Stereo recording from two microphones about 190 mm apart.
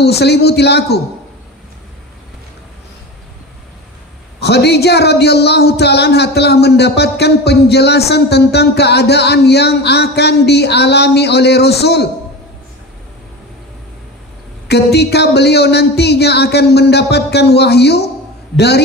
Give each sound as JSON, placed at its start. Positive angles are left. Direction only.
{"t": 0.0, "sound": "speech", "side_deg": 60}
{"t": 4.4, "sound": "speech", "side_deg": 60}
{"t": 14.7, "sound": "speech", "side_deg": 60}